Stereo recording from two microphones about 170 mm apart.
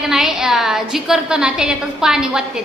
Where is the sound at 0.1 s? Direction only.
5° right (ahead or behind).